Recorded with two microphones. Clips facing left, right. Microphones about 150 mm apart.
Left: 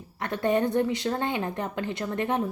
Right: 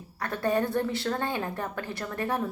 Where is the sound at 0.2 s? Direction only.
20° left (ahead or behind).